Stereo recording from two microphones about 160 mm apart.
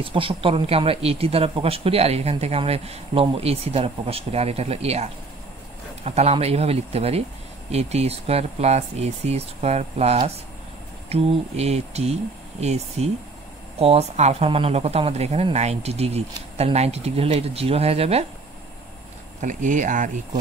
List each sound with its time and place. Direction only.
0.0 s speech: 35° right (ahead or behind)
19.4 s speech: 55° right (ahead or behind)